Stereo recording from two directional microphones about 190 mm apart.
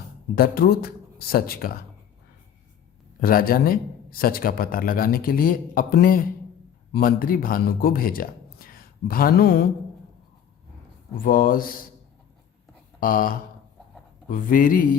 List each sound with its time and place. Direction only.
0.3 s speech: 50° left (ahead or behind)
3.2 s speech: 50° left (ahead or behind)
11.2 s speech: 45° left (ahead or behind)
13.0 s speech: 45° left (ahead or behind)